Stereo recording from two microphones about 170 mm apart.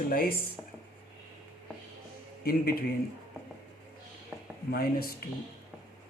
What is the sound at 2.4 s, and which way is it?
Speech, 60° left (ahead or behind).